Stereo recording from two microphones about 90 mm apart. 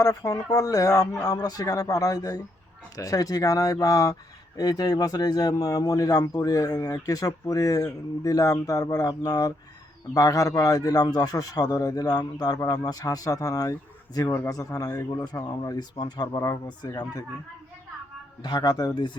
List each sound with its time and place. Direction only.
0.0 s speech: 45° left (ahead or behind)
18.4 s speech: 55° left (ahead or behind)